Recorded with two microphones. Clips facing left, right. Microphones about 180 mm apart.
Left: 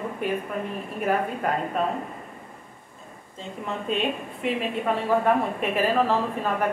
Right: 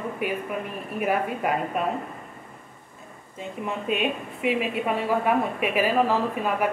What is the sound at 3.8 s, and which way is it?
A woman's voice, 10° right (ahead or behind).